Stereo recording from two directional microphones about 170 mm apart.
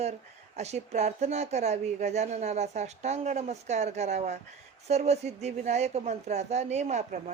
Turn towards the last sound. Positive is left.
turn(degrees=-45)  # may be behind; listen again after turning